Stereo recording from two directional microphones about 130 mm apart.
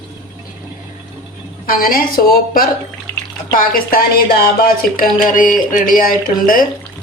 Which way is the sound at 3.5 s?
90° left.